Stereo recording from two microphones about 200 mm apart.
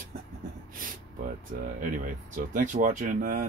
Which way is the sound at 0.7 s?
45° right (ahead or behind).